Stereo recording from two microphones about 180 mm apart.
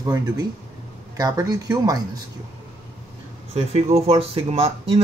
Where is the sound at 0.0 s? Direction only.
20° right (ahead or behind).